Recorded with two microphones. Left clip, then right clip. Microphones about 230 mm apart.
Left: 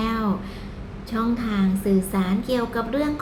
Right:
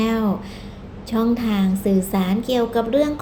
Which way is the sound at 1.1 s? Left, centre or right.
Centre.